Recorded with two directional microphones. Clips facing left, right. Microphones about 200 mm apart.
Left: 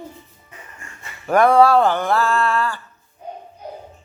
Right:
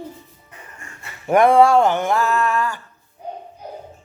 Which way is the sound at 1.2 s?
20° right (ahead or behind).